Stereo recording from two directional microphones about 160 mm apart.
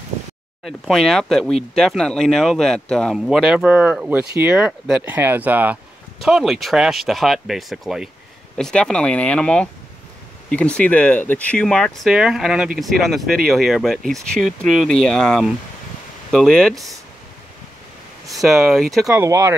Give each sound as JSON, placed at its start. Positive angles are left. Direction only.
{"t": 0.7, "sound": "speech", "side_deg": 0}
{"t": 18.3, "sound": "speech", "side_deg": 0}
{"t": 19.1, "sound": "speech", "side_deg": -15}